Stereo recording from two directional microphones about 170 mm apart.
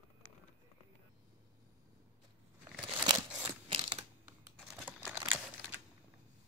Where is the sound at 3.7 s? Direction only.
30° right (ahead or behind).